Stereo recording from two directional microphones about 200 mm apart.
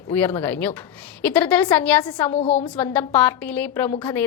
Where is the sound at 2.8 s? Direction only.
10° left (ahead or behind).